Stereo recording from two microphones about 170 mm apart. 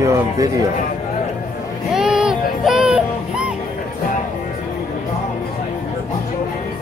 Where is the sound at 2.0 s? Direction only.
5° right (ahead or behind).